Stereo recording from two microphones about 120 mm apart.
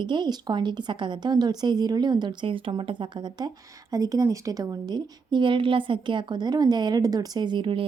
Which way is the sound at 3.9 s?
30° right (ahead or behind).